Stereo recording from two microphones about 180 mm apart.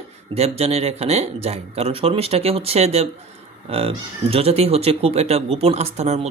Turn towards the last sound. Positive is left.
turn(degrees=-35)  # may be behind; listen again after turning